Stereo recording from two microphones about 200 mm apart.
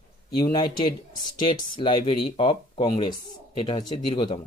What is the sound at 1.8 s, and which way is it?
Speech, 25° left (ahead or behind).